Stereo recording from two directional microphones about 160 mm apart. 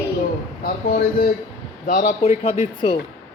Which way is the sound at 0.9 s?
70° left (ahead or behind).